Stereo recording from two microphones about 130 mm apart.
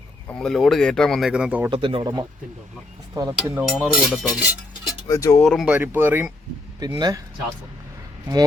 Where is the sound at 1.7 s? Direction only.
45° right (ahead or behind).